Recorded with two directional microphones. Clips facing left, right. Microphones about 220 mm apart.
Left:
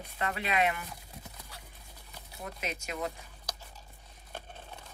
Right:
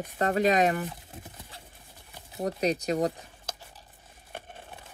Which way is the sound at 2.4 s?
40° right (ahead or behind).